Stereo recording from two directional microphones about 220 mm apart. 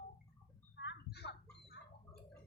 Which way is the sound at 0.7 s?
55° left (ahead or behind).